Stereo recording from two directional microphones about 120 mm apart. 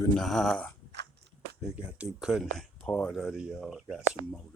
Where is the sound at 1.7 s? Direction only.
10° right (ahead or behind).